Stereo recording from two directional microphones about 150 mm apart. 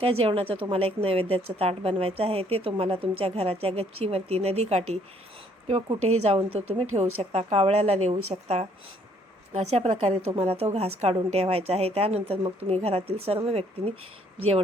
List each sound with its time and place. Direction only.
0.0 s a woman's voice: 40° right (ahead or behind)
6.2 s a woman's voice: 45° right (ahead or behind)